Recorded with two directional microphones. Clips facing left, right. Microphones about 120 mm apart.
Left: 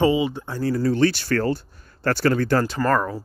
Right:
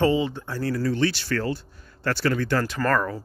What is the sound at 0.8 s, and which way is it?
Speech, 45° left (ahead or behind).